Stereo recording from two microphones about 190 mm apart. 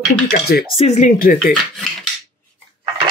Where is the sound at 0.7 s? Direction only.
35° left (ahead or behind).